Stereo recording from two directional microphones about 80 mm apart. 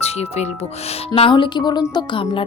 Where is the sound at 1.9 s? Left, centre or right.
Left.